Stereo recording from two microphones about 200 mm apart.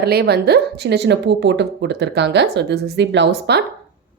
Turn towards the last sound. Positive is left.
turn(degrees=-55)  # may be behind; listen again after turning